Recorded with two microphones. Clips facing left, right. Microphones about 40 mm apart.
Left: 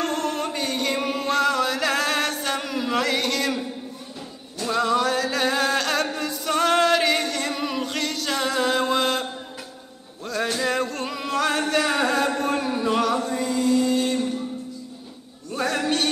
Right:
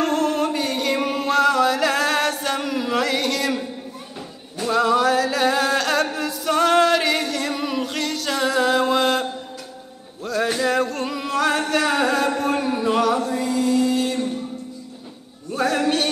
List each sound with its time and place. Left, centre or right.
0.0 s music: centre
4.6 s music: centre
15.5 s music: centre